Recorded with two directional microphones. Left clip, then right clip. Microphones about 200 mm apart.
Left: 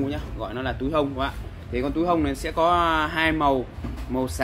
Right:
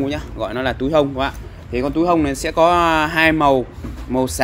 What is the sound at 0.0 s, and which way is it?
A man's voice, 40° right (ahead or behind).